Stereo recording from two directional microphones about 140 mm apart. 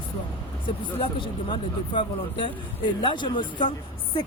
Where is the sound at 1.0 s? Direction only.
35° left (ahead or behind).